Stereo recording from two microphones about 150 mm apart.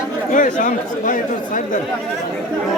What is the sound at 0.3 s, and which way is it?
Speech, 60° left (ahead or behind).